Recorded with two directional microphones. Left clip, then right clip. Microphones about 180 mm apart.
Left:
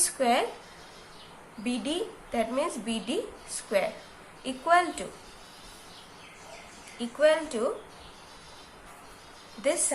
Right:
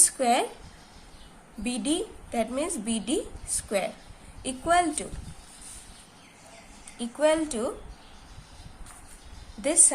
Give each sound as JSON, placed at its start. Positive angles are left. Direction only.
{"t": 0.0, "sound": "a sound", "side_deg": -45}
{"t": 1.6, "sound": "a woman's voice", "side_deg": -45}
{"t": 7.0, "sound": "a woman's voice", "side_deg": -45}